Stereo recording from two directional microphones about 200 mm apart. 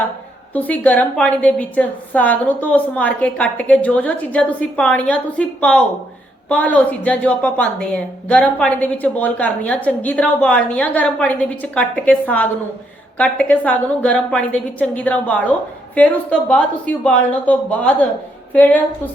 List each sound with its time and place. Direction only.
0.5 s a woman's voice: 10° left (ahead or behind)